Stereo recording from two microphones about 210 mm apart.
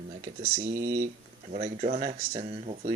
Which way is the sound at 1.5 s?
35° right (ahead or behind).